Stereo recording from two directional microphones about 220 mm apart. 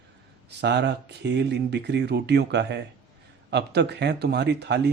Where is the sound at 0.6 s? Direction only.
50° right (ahead or behind).